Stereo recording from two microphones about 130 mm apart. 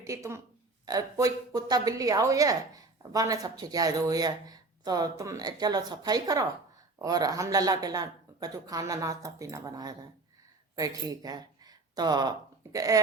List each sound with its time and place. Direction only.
0.0 s a woman's voice: 25° right (ahead or behind)